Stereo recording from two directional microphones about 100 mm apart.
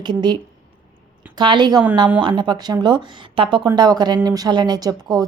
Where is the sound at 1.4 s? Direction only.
50° right (ahead or behind).